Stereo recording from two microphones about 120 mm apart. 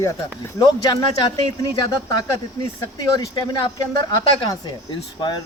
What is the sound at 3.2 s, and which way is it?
Speech, 35° left (ahead or behind).